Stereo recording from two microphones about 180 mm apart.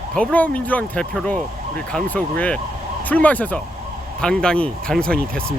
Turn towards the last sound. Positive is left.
turn(degrees=5)  # may be behind; listen again after turning